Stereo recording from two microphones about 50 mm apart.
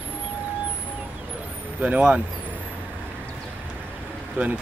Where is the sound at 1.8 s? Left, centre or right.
Right.